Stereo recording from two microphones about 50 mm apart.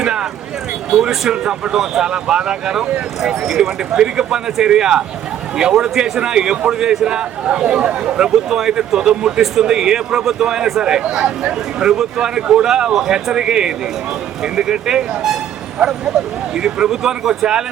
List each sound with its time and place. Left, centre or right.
0.0 s vehicle: centre
0.9 s speech: centre
1.3 s speech: centre
8.4 s speech: centre
16.6 s speech: centre